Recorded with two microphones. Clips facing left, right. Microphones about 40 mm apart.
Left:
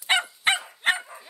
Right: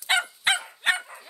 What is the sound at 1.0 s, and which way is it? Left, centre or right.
Dog, centre.